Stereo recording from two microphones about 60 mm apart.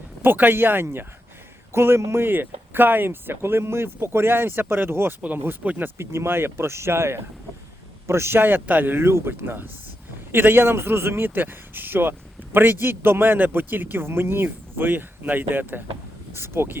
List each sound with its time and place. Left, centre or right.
0.2 s a man's voice: right
2.2 s a man's voice: right